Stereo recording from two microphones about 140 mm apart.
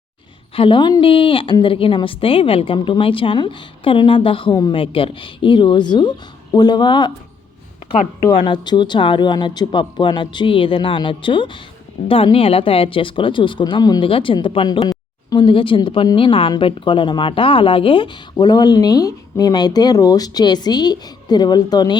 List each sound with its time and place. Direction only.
0.5 s a woman's voice: 40° left (ahead or behind)
8.4 s a woman's voice: 35° left (ahead or behind)